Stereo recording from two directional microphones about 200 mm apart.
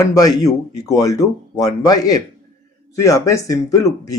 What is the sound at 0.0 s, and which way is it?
Speech, 15° left (ahead or behind).